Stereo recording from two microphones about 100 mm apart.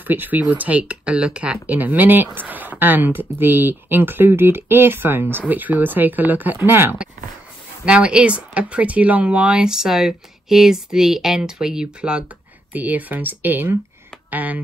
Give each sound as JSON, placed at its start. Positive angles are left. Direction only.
{"t": 0.0, "sound": "speech", "side_deg": -20}
{"t": 7.8, "sound": "speech", "side_deg": -10}